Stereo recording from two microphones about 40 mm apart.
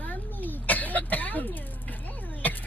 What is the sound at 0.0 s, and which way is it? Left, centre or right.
Cough, left.